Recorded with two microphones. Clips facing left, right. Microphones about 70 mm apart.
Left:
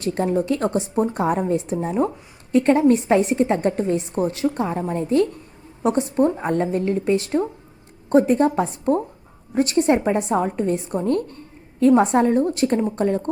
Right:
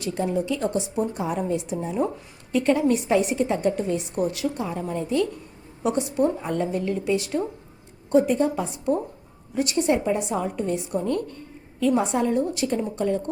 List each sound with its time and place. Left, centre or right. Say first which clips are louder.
0.0 s a woman's voice: left 4 dB; left